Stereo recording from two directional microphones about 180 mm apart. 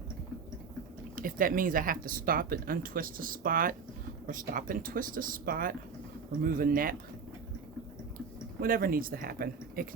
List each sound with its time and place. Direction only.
1.1 s speech: 50° right (ahead or behind)
8.6 s speech: 55° right (ahead or behind)